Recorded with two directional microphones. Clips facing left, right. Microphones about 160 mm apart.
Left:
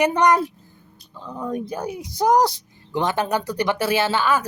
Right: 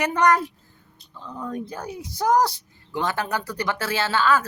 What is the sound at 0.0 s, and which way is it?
Speech, 20° left (ahead or behind).